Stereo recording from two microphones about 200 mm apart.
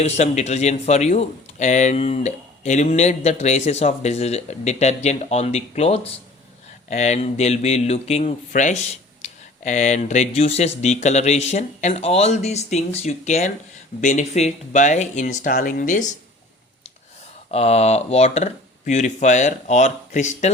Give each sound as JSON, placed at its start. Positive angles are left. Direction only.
{"t": 0.0, "sound": "speech", "side_deg": 35}
{"t": 17.5, "sound": "speech", "side_deg": 30}